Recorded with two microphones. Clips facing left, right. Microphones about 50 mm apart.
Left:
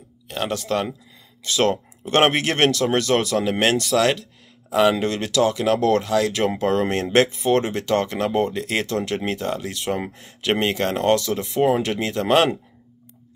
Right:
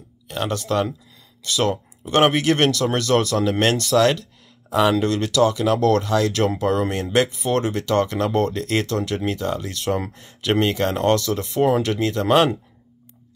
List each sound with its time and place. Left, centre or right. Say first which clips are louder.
0.6 s speech: right 4 dB; centre
1.6 s speech: left 2 dB; left
6.0 s speech: right 1 dB; centre
6.6 s speech: left 1 dB; left